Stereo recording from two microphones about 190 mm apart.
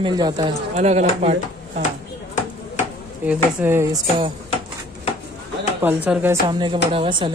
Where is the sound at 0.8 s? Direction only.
35° right (ahead or behind).